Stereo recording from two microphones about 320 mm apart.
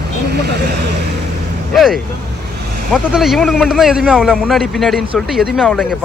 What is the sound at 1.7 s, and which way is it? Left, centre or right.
Speech, centre.